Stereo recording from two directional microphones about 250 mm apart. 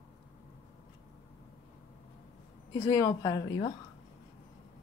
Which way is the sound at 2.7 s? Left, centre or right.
Centre.